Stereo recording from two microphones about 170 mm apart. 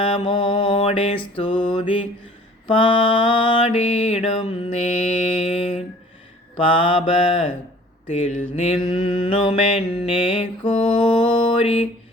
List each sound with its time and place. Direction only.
0.0 s mantra: 30° left (ahead or behind)